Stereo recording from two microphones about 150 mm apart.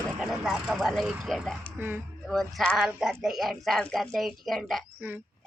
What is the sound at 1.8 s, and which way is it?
Speech, 15° right (ahead or behind).